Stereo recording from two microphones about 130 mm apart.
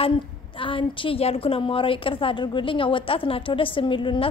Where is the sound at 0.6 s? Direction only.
40° left (ahead or behind).